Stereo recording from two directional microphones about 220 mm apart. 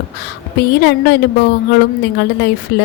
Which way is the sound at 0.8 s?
50° left (ahead or behind).